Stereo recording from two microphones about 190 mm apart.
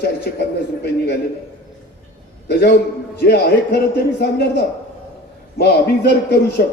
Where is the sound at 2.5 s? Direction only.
60° left (ahead or behind).